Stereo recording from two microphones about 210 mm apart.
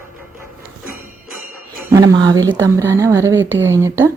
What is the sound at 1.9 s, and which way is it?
Speech, 20° right (ahead or behind).